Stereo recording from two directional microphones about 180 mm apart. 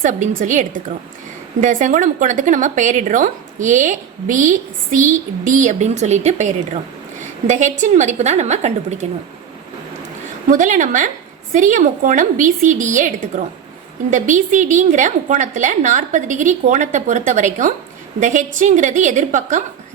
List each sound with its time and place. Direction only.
0.0 s a woman's voice: 45° right (ahead or behind)
10.5 s speech: 45° right (ahead or behind)